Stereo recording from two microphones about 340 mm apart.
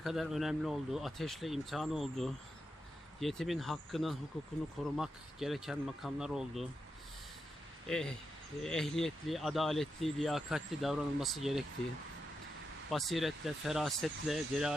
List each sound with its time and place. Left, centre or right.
0.0 s speech: centre
7.9 s speech: centre
12.9 s speech: centre